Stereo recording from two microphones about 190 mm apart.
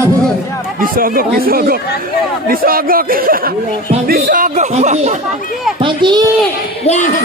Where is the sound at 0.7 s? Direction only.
50° right (ahead or behind).